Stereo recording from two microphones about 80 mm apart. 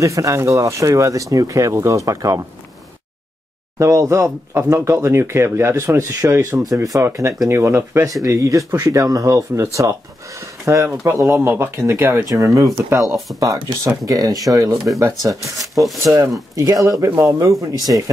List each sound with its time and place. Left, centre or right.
0.0 s speech: right
3.7 s speech: right
6.6 s speech: right
17.0 s speech: right